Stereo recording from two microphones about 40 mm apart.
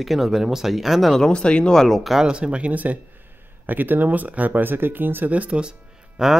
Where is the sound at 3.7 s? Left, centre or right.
Right.